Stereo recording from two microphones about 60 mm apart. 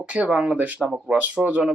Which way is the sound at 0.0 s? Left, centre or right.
Centre.